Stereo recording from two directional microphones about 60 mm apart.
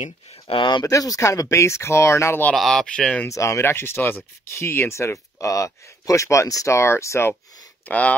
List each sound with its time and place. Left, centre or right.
0.8 s speech: left
1.3 s speech: left
2.5 s speech: centre
3.3 s speech: left
3.6 s speech: left
4.5 s speech: left
6.8 s speech: left
7.8 s speech: left